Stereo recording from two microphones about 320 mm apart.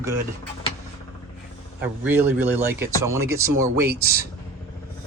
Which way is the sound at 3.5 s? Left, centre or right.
Right.